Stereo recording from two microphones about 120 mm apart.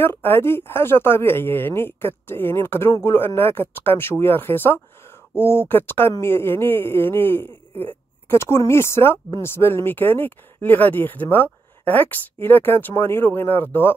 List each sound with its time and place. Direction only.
0.0 s speech: 20° left (ahead or behind)